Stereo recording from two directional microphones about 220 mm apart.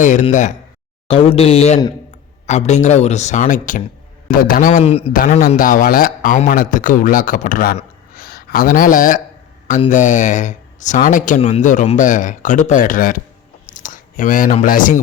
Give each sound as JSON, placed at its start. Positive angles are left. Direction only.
{"t": 0.0, "sound": "a man's voice", "side_deg": 35}
{"t": 5.5, "sound": "a man's voice", "side_deg": 40}